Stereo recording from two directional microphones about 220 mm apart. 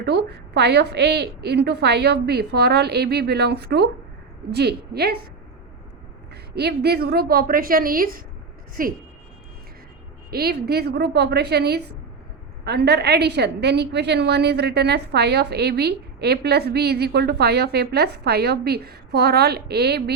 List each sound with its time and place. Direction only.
0.0 s a woman's voice: 50° right (ahead or behind)
6.3 s a woman's voice: 45° right (ahead or behind)
10.3 s a woman's voice: 45° right (ahead or behind)